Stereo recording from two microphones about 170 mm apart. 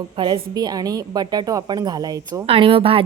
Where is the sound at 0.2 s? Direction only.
30° right (ahead or behind).